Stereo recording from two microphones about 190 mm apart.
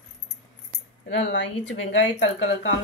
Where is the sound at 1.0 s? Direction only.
70° left (ahead or behind).